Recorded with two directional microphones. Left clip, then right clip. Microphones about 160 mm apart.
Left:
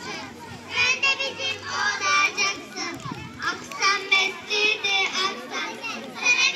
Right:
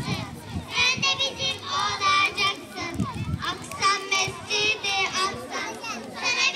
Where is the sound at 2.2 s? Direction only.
90° right.